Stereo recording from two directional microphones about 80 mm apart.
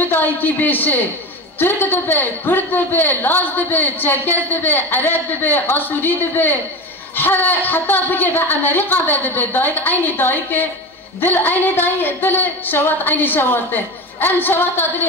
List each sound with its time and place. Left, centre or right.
0.1 s a man's voice: left